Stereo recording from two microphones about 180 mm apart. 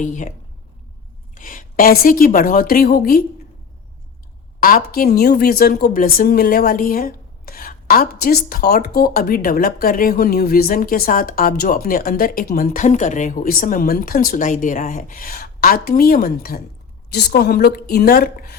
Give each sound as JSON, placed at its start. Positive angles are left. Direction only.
{"t": 0.0, "sound": "a woman's voice", "side_deg": 45}
{"t": 1.4, "sound": "a woman's voice", "side_deg": 50}
{"t": 4.6, "sound": "a woman's voice", "side_deg": 55}